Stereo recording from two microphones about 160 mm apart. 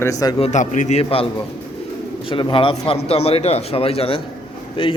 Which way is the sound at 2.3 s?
30° left (ahead or behind).